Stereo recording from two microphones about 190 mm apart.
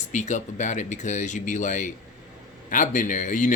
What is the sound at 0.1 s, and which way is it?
Speech, 40° left (ahead or behind).